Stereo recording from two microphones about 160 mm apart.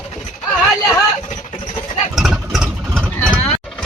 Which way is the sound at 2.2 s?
Centre (ahead or behind).